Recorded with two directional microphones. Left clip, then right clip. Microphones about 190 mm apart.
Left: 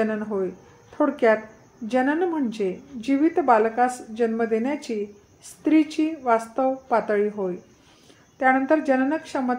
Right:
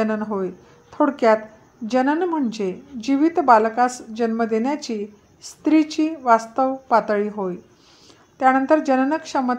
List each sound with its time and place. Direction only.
0.0 s a woman's voice: 35° right (ahead or behind)